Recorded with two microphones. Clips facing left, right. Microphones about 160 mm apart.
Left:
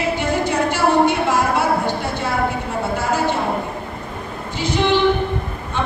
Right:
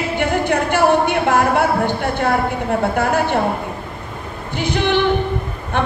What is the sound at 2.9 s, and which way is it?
Speech, 60° right (ahead or behind).